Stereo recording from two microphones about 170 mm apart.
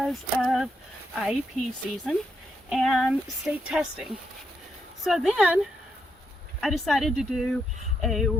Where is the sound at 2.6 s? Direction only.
Centre (ahead or behind).